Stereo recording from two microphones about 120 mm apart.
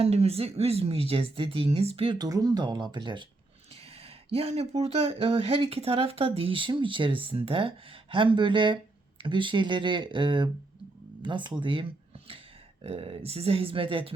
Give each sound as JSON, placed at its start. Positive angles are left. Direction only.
{"t": 0.0, "sound": "speech", "side_deg": -55}
{"t": 2.1, "sound": "speech", "side_deg": -30}
{"t": 3.9, "sound": "speech", "side_deg": -55}